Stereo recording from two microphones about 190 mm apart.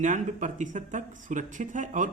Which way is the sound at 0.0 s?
40° right (ahead or behind).